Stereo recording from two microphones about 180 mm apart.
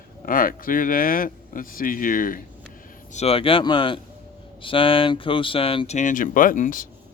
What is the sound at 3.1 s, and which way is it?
Speech, 35° left (ahead or behind).